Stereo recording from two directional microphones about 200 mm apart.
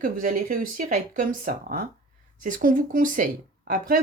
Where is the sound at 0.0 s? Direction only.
40° right (ahead or behind).